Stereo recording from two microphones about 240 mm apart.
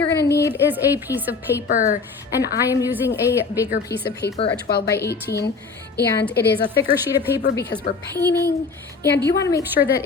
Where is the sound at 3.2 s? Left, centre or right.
Centre.